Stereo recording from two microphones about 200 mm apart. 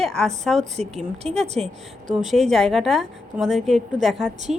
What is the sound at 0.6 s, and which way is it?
A woman's voice, 35° right (ahead or behind).